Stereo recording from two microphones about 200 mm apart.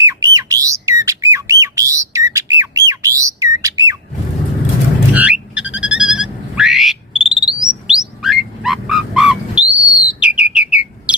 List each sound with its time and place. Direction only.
0.0 s squawk: 15° right (ahead or behind)
5.1 s a sound: 5° right (ahead or behind)
7.4 s bird: 5° right (ahead or behind)